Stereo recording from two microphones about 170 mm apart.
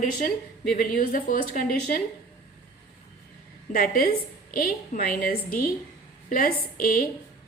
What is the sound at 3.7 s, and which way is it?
A woman's voice, 55° left (ahead or behind).